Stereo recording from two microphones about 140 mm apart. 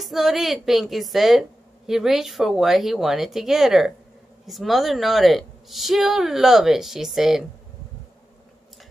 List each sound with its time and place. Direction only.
0.0 s a woman's voice: centre (ahead or behind)